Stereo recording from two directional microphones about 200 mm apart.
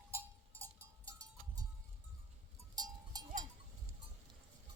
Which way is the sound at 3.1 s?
20° right (ahead or behind).